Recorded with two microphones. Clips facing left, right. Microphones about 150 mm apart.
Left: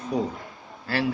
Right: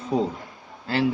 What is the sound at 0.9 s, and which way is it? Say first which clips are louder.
Speech: right 2 dB; 25° right (ahead or behind).